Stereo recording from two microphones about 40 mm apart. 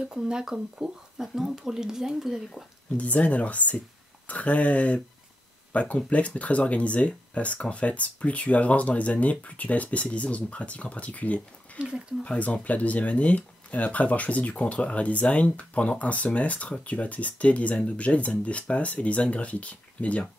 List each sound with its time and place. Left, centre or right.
0.1 s speech: centre
3.0 s speech: left